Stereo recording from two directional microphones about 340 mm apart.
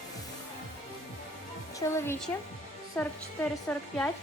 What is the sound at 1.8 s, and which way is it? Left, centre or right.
A woman's voice, centre.